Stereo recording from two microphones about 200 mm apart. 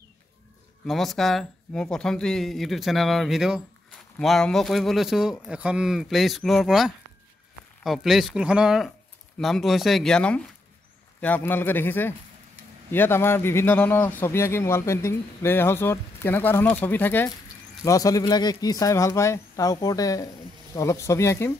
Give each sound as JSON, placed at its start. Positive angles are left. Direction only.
{"t": 0.8, "sound": "a man's voice", "side_deg": 0}